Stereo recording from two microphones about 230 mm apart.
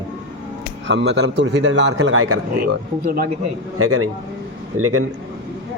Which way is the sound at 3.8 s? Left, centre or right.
Right.